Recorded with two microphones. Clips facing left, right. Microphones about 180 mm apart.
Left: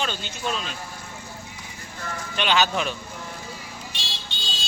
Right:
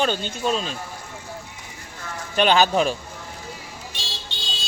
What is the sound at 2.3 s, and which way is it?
Speech, 40° right (ahead or behind).